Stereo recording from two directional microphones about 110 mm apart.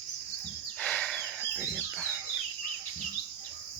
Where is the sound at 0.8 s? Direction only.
10° left (ahead or behind).